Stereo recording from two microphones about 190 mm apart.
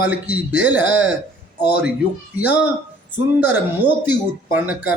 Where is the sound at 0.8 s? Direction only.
90° right.